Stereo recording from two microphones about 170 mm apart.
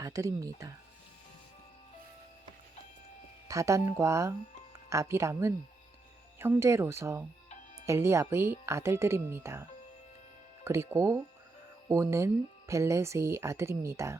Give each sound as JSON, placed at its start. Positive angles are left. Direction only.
{"t": 0.0, "sound": "speech", "side_deg": -20}
{"t": 3.5, "sound": "speech", "side_deg": -20}